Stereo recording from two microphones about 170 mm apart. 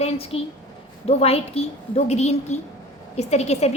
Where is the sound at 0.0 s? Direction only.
35° left (ahead or behind).